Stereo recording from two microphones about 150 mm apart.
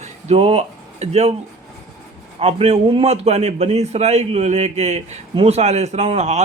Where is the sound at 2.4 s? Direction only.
40° right (ahead or behind).